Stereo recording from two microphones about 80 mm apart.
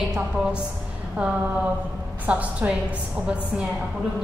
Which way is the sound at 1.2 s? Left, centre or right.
Centre.